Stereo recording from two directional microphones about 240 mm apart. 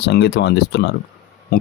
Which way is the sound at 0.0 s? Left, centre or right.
Left.